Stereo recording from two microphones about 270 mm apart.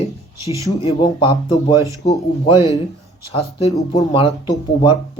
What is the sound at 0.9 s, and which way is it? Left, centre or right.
Speech, centre.